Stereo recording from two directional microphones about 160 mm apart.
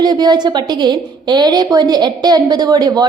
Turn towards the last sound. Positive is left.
turn(degrees=-25)  # may be behind; listen again after turning